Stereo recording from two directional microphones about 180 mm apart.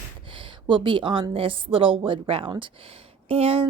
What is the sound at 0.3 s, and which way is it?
A woman's voice, 30° right (ahead or behind).